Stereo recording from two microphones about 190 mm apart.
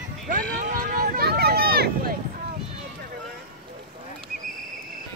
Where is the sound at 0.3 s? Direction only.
45° right (ahead or behind).